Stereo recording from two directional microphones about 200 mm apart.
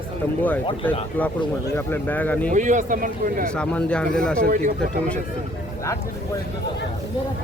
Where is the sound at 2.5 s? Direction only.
40° right (ahead or behind).